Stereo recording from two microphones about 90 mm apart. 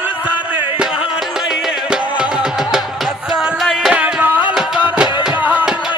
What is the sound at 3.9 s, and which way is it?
Music, 15° right (ahead or behind).